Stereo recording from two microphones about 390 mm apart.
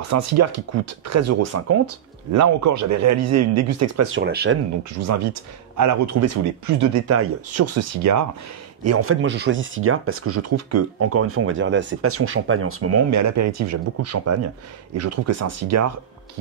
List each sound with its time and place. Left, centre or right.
0.1 s speech: right
5.0 s speech: right